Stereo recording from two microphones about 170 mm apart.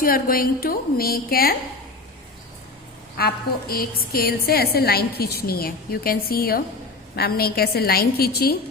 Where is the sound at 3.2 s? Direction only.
65° left (ahead or behind).